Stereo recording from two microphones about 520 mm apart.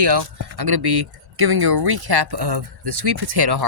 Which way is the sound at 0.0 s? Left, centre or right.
Right.